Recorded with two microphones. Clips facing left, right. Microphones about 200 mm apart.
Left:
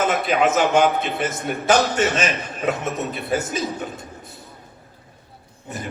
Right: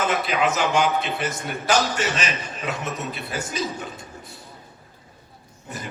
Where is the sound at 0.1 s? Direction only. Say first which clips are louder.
Left 4 dB; 55° left (ahead or behind).